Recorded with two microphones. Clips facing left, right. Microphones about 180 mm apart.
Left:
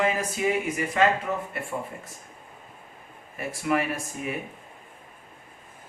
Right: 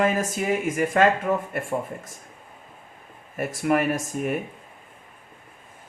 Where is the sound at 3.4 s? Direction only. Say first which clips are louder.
Right 4 dB; 45° right (ahead or behind).